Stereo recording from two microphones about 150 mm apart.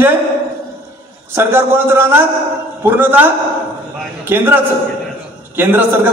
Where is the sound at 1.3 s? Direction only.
15° right (ahead or behind).